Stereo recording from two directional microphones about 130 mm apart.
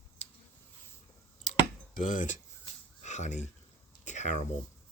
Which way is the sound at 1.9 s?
80° left.